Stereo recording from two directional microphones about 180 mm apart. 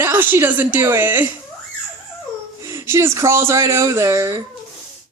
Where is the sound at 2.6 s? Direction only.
15° right (ahead or behind).